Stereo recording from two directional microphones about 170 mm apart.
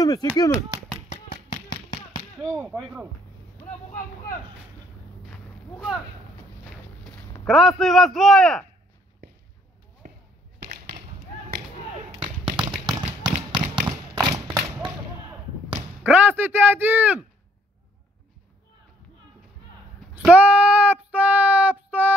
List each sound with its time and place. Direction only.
0.0 s clapping: 20° left (ahead or behind)
1.0 s tap: 45° left (ahead or behind)
1.5 s a sound: 25° left (ahead or behind)
2.4 s speech: 15° right (ahead or behind)
2.8 s a man's voice: 5° right (ahead or behind)
5.3 s a sound: 5° right (ahead or behind)
7.4 s a man's voice: centre (ahead or behind)
10.0 s basketball bounce: 60° right (ahead or behind)
10.6 s a sound: 55° right (ahead or behind)
12.2 s a sound: 30° right (ahead or behind)
15.7 s artillery fire: 10° right (ahead or behind)
20.2 s child singing: 5° right (ahead or behind)